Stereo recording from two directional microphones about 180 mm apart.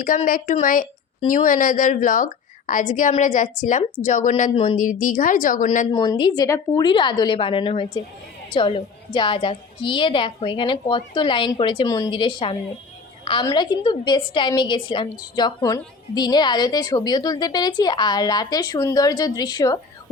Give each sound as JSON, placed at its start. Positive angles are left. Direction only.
{"t": 0.0, "sound": "a woman's voice", "side_deg": 50}
{"t": 4.5, "sound": "speech", "side_deg": 30}
{"t": 4.8, "sound": "a woman's voice", "side_deg": 45}
{"t": 5.9, "sound": "a woman's voice", "side_deg": 25}